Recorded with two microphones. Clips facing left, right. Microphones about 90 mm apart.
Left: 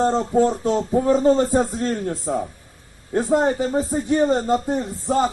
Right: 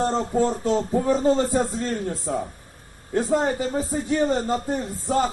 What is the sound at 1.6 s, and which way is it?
Speech, centre (ahead or behind).